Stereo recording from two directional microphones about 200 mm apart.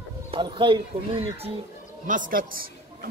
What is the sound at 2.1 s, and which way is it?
Speech, 45° right (ahead or behind).